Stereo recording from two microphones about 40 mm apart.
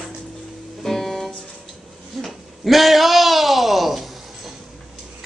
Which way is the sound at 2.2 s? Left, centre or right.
Centre.